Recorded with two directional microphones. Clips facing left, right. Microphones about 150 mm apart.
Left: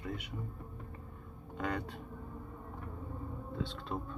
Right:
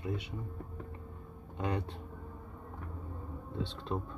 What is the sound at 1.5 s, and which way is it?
Speech, 25° right (ahead or behind).